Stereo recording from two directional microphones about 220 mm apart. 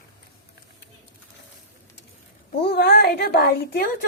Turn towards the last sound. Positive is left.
turn(degrees=45)  # may be behind; listen again after turning